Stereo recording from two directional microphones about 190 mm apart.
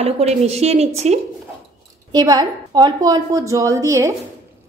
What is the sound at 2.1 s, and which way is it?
A woman's voice, 20° right (ahead or behind).